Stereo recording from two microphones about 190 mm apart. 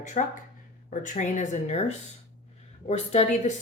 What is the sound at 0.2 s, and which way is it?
Speech, 45° left (ahead or behind).